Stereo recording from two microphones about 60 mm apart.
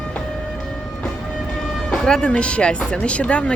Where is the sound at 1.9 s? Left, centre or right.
Centre.